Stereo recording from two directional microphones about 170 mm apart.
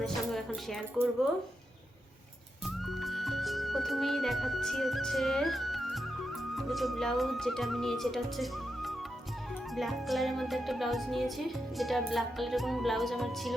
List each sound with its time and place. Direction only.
0.0 s speech: centre (ahead or behind)
2.6 s speech: centre (ahead or behind)